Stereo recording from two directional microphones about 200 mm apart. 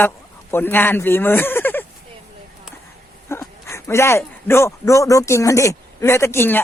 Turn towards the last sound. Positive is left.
turn(degrees=10)  # may be behind; listen again after turning